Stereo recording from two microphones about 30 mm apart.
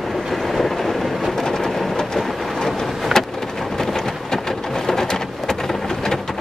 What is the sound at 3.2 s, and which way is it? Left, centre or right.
Rain, centre.